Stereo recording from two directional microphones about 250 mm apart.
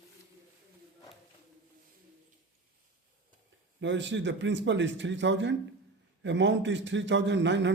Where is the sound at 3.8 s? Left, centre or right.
Right.